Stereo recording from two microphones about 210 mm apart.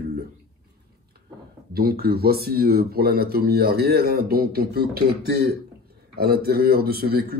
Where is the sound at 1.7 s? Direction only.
45° right (ahead or behind).